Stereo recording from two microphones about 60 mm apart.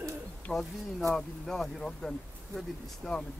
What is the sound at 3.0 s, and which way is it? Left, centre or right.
Speech, centre.